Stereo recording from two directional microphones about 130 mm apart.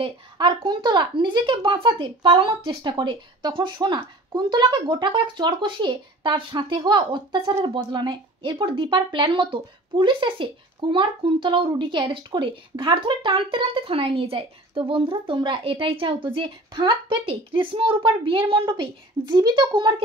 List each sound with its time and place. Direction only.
0.0 s speech: 40° right (ahead or behind)